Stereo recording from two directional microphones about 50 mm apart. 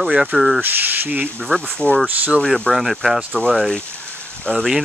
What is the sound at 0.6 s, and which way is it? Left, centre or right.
Speech, right.